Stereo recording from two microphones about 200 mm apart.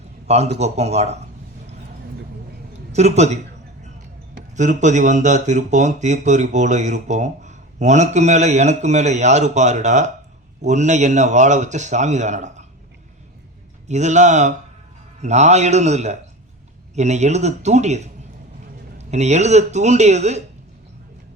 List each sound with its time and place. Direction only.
0.3 s speech: 30° right (ahead or behind)
2.9 s a woman's voice: 35° right (ahead or behind)
4.5 s speech: 35° right (ahead or behind)
13.8 s speech: 35° right (ahead or behind)